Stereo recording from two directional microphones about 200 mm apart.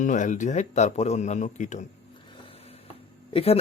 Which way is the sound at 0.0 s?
40° left (ahead or behind).